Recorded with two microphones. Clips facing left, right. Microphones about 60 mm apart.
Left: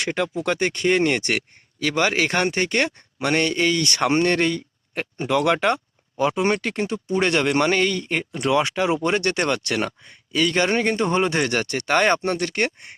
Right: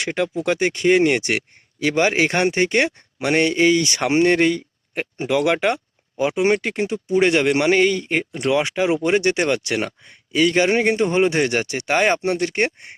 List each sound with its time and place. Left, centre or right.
0.0 s speech: centre
12.5 s speech: right